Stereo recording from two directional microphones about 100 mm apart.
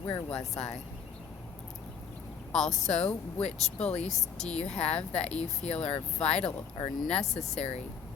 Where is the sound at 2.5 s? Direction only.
5° left (ahead or behind).